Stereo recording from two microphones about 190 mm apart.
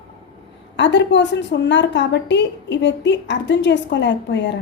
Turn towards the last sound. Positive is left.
turn(degrees=70)  # may be behind; listen again after turning